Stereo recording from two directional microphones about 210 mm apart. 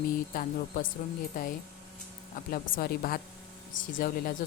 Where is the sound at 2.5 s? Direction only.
45° left (ahead or behind).